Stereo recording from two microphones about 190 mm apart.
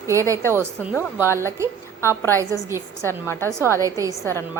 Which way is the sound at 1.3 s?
15° right (ahead or behind).